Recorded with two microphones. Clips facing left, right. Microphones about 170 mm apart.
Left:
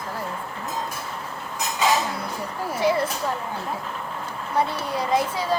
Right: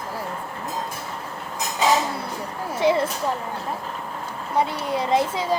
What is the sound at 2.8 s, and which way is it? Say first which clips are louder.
Speech: right 2 dB; 20° right (ahead or behind).